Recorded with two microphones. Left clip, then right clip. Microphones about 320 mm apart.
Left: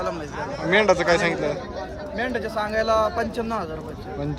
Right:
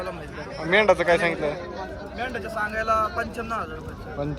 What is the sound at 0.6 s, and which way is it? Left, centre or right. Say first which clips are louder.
Speech: even; centre.